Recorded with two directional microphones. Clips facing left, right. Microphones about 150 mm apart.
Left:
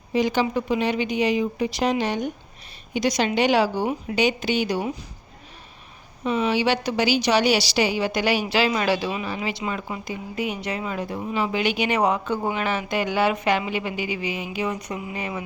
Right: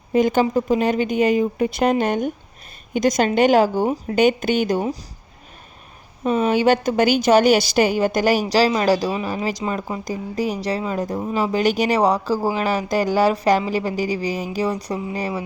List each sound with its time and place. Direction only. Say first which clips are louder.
0.1 s speech: right 5 dB; 50° right (ahead or behind)
6.2 s a woman's voice: right 5 dB; 45° right (ahead or behind)